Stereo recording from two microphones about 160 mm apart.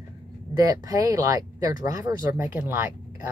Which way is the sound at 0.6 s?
20° right (ahead or behind).